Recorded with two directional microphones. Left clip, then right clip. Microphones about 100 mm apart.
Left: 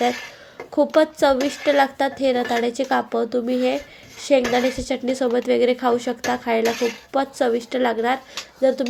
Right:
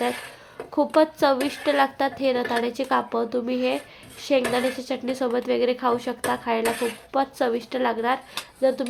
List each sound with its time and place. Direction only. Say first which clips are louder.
0.9 s a woman's voice: left 2 dB; 20° left (ahead or behind)